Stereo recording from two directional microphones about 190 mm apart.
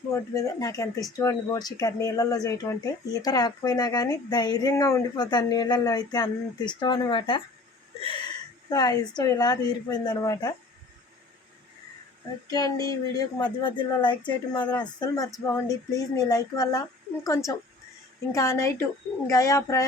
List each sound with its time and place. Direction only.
0.1 s speech: 15° left (ahead or behind)
12.5 s a woman's voice: 20° left (ahead or behind)